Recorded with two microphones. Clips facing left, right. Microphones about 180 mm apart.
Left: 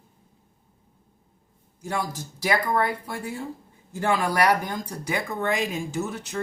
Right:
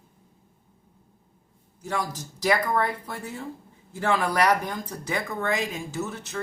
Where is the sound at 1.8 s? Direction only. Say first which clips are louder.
Left 1 dB; 10° left (ahead or behind).